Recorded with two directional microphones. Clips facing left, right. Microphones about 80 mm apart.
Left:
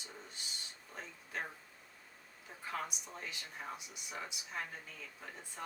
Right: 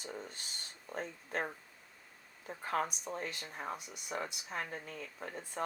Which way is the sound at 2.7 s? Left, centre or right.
Right.